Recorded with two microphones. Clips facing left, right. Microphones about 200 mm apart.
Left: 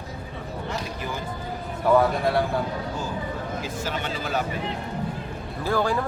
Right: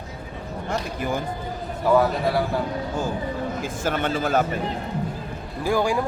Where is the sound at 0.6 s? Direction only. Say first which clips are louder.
Right 6 dB; 50° right (ahead or behind).